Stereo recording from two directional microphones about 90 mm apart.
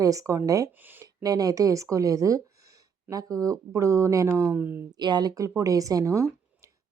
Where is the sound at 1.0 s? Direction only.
45° right (ahead or behind); by 4.8 s 25° right (ahead or behind).